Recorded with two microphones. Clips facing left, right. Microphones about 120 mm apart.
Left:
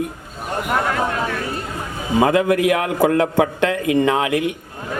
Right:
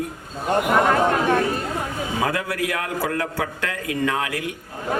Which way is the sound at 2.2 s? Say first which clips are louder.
Left 10 dB; 20° left (ahead or behind).